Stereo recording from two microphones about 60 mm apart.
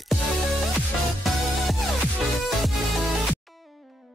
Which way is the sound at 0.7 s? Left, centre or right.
Centre.